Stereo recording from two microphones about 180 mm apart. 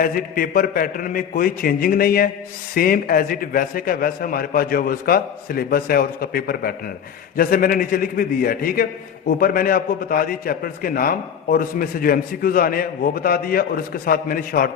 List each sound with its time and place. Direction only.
0.0 s a man's voice: 50° left (ahead or behind)